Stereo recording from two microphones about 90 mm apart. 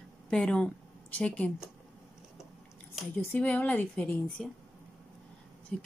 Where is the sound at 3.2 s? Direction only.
20° left (ahead or behind).